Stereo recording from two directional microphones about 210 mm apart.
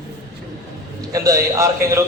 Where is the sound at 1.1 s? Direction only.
15° right (ahead or behind).